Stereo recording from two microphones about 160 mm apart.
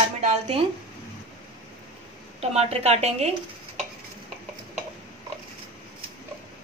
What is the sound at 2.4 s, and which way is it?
Speech, 40° right (ahead or behind).